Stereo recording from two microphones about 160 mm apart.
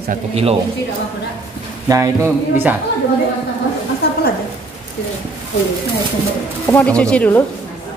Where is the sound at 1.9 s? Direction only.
15° right (ahead or behind).